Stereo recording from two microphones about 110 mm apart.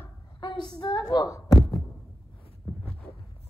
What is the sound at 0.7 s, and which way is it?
Speech, 40° left (ahead or behind).